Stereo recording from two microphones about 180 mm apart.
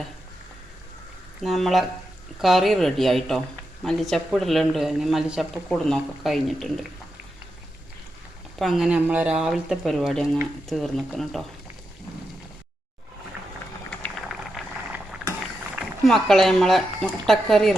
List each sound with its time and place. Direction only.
1.4 s speech: centre (ahead or behind)
8.5 s speech: centre (ahead or behind)
13.9 s boiling: 5° left (ahead or behind)
16.0 s speech: centre (ahead or behind)